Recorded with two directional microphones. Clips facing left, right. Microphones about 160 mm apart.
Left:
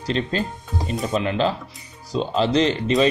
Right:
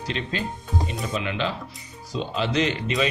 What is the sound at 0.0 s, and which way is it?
Speech, 35° left (ahead or behind).